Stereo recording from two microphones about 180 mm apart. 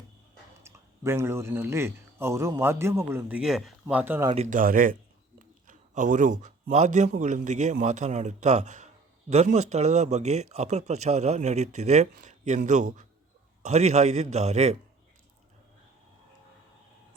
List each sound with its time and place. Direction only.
0.6 s speech: 15° right (ahead or behind)
4.4 s speech: 45° right (ahead or behind)